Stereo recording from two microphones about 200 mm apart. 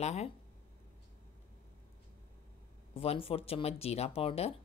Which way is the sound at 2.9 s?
30° left (ahead or behind).